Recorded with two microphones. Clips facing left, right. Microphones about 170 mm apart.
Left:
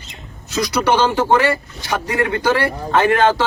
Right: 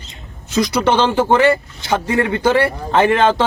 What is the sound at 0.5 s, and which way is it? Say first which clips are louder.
A man's voice: right 2 dB; 25° right (ahead or behind).